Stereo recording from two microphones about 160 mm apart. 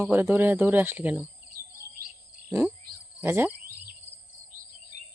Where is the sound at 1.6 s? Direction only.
70° right (ahead or behind).